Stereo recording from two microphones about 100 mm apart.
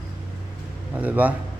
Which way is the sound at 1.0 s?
15° right (ahead or behind).